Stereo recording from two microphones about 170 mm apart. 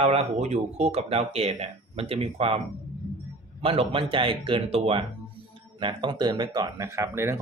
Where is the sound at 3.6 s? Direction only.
35° right (ahead or behind).